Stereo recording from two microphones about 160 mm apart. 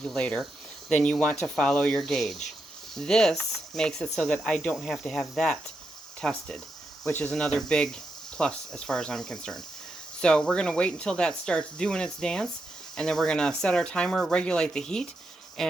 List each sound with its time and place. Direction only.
0.0 s speech: 5° left (ahead or behind)